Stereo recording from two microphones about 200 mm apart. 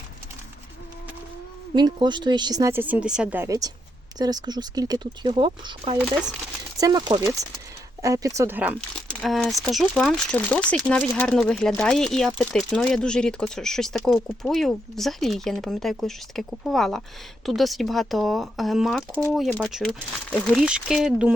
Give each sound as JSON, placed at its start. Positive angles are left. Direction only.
{"t": 1.7, "sound": "speech", "side_deg": -20}